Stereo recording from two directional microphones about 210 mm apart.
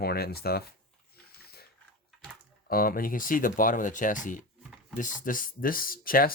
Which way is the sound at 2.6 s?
45° left (ahead or behind).